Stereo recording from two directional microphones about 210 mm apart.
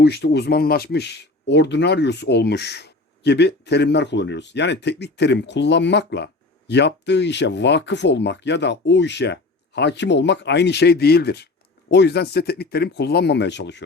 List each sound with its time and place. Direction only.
0.0 s speech: 50° left (ahead or behind)